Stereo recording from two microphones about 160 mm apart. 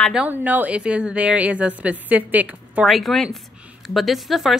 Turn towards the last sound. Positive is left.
turn(degrees=0)  # may be behind; listen again after turning